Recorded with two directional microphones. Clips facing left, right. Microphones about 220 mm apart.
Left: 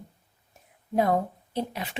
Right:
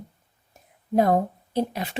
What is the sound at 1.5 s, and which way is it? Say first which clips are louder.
Speech: right 5 dB; 40° right (ahead or behind).